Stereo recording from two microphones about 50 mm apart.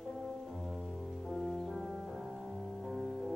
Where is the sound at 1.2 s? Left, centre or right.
Centre.